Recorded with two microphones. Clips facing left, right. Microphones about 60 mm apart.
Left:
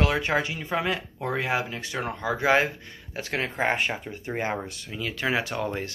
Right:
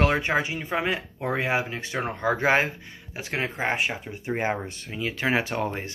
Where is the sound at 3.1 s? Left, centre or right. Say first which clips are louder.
Even; centre.